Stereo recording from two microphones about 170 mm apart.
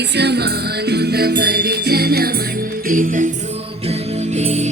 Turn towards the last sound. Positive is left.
turn(degrees=-55)  # may be behind; listen again after turning